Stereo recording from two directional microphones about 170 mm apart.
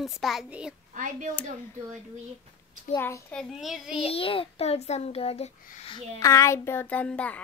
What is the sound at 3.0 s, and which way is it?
Speech, 15° left (ahead or behind).